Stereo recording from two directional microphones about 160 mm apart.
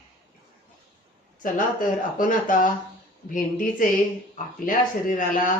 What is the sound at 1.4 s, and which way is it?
Speech, 60° left (ahead or behind).